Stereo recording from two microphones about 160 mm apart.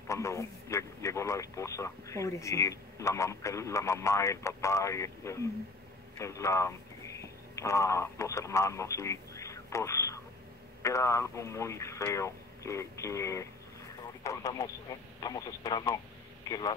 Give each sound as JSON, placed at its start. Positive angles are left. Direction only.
{"t": 0.1, "sound": "a man's voice", "side_deg": 20}